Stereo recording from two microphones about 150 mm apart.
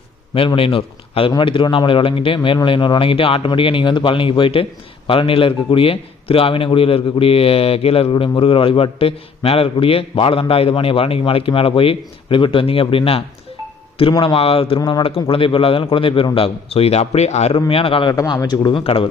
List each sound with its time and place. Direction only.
0.3 s a man's voice: 40° left (ahead or behind)
18.1 s a man's voice: 20° left (ahead or behind)
18.8 s a man's voice: 40° left (ahead or behind)